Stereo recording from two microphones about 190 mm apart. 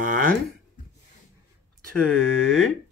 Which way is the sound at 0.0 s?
45° right (ahead or behind).